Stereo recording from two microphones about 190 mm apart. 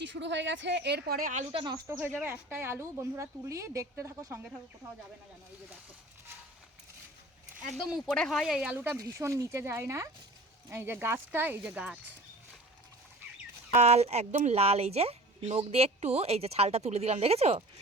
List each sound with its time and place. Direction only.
0.0 s speech: 70° right (ahead or behind); by 1.5 s 45° right (ahead or behind)
1.5 s speech: 20° right (ahead or behind)
2.0 s speech: 10° right (ahead or behind)
7.7 s speech: centre (ahead or behind)
13.7 s speech: 35° right (ahead or behind)